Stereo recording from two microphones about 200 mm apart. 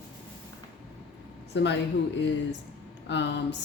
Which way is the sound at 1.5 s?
60° left (ahead or behind).